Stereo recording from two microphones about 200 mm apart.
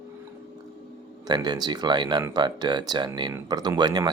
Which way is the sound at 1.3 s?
20° right (ahead or behind).